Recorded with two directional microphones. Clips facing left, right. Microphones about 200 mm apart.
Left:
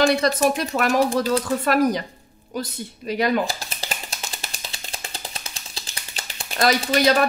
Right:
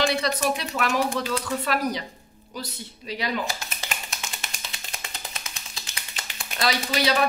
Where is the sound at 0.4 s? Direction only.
45° left (ahead or behind).